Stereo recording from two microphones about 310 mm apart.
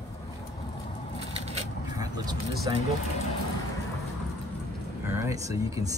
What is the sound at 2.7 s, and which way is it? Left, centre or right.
Speech, centre.